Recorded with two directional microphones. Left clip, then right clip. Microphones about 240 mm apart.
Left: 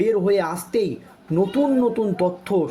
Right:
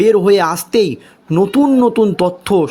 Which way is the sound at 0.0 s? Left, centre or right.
Right.